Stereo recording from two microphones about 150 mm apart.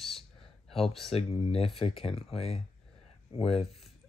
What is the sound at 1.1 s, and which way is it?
Speech, 40° left (ahead or behind).